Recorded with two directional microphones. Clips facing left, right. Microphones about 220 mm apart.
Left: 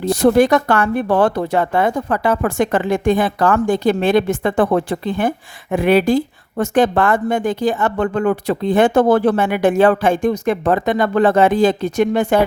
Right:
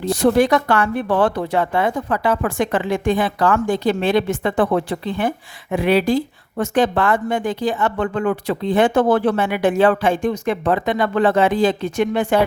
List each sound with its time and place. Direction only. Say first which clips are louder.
0.1 s a woman's voice: left 3 dB; 45° left (ahead or behind)